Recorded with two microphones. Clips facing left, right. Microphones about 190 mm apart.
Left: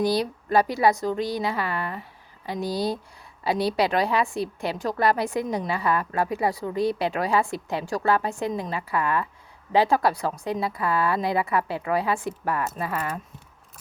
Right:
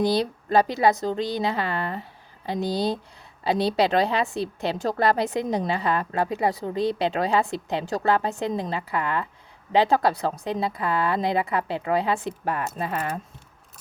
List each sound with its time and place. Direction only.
0.0 s a woman's voice: 25° right (ahead or behind)